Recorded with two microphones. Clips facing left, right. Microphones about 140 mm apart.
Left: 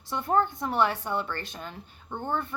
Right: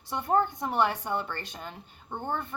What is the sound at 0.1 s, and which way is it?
A woman's voice, 15° right (ahead or behind).